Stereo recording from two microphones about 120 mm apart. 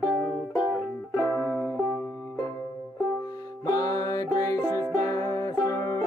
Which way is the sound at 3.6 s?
30° left (ahead or behind).